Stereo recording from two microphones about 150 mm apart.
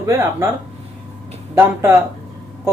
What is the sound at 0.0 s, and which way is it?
Speech, 20° right (ahead or behind).